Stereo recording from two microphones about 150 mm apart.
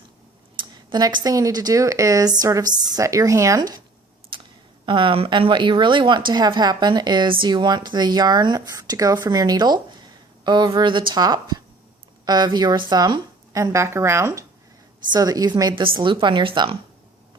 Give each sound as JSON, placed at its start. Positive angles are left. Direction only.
{"t": 0.5, "sound": "a woman's voice", "side_deg": -30}
{"t": 4.3, "sound": "a sound", "side_deg": -35}
{"t": 4.9, "sound": "a woman's voice", "side_deg": -35}